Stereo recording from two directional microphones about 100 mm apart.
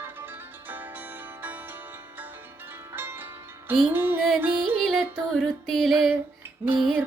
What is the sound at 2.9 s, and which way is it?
Music, 20° right (ahead or behind).